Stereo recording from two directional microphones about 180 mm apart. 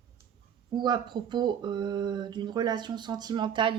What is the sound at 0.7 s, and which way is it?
Speech, 25° right (ahead or behind).